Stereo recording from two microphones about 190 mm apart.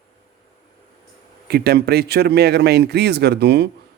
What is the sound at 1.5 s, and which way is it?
A man's voice, 55° right (ahead or behind).